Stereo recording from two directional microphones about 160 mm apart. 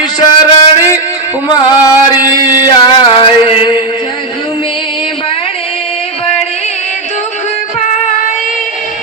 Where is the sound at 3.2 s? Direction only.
35° left (ahead or behind).